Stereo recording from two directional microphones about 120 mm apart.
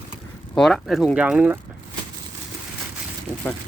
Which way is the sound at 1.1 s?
10° right (ahead or behind).